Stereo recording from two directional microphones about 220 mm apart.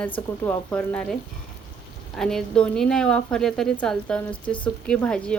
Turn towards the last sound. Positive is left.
turn(degrees=5)  # may be behind; listen again after turning